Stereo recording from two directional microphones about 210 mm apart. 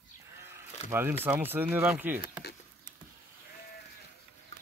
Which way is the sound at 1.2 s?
10° right (ahead or behind).